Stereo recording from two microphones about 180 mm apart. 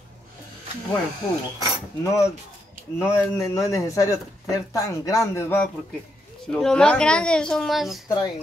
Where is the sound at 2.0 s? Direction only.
15° left (ahead or behind).